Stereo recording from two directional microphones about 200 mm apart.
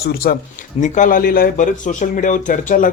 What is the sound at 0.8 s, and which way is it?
Speech, 40° left (ahead or behind).